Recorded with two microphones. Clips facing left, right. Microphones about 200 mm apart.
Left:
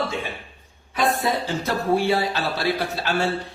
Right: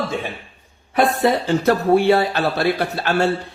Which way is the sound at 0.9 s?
65° right (ahead or behind).